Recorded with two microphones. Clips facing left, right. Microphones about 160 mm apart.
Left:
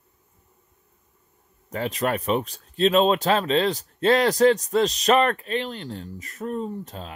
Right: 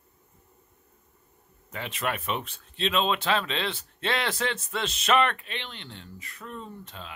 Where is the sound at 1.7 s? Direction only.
40° left (ahead or behind).